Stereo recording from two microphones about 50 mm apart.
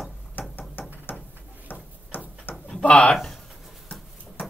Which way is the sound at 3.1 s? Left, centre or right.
Centre.